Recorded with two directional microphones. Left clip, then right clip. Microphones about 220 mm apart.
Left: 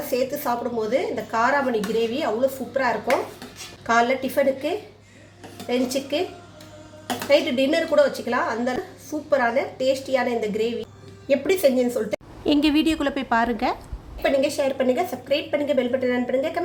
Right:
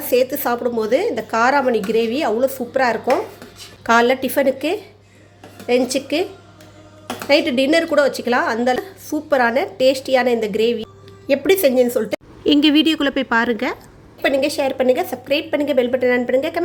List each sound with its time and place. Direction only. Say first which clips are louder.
0.0 s a woman's voice: right 7 dB; 40° right (ahead or behind)
7.3 s a woman's voice: right 4 dB; 35° right (ahead or behind)
12.5 s a woman's voice: right 6 dB; 10° right (ahead or behind)
14.2 s a woman's voice: right 3 dB; 30° right (ahead or behind)